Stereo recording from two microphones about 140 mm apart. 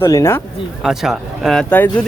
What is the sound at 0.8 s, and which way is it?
Speech, 5° right (ahead or behind).